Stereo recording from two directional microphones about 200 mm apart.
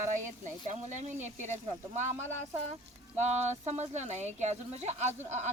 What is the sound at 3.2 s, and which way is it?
A woman's voice, 35° right (ahead or behind).